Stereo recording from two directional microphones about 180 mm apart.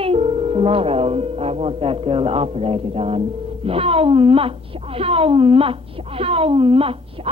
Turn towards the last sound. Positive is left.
turn(degrees=-30)  # may be behind; listen again after turning